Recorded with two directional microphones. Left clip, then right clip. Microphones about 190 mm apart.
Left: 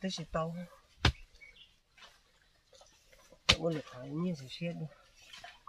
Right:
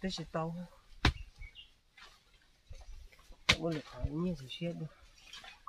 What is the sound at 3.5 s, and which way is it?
Speech, 15° left (ahead or behind).